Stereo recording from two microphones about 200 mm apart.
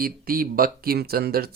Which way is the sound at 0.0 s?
45° right (ahead or behind).